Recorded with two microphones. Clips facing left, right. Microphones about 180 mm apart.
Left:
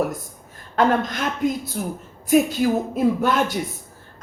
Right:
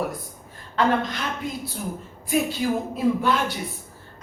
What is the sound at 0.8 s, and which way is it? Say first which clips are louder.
Speech: left 3 dB; 45° left (ahead or behind).